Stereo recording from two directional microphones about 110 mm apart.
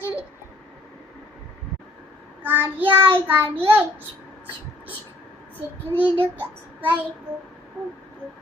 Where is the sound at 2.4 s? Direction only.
15° right (ahead or behind).